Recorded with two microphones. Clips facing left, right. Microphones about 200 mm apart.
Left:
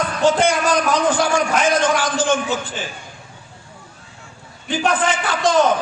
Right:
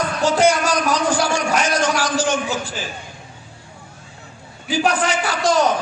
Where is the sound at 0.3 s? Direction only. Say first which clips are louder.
Even; 55° left (ahead or behind).